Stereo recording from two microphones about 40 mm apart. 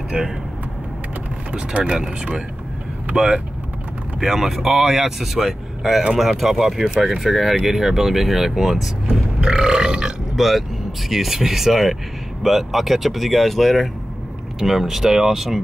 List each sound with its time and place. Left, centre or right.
0.1 s speech: right
1.5 s speech: right
3.2 s speech: right
4.2 s speech: centre
9.4 s burping: centre
10.3 s speech: centre
14.6 s speech: centre